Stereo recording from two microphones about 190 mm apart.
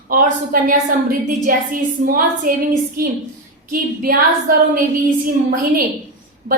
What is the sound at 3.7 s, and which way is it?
Speech, 50° right (ahead or behind).